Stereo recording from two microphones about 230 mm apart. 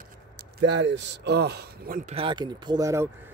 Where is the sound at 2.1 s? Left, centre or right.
Right.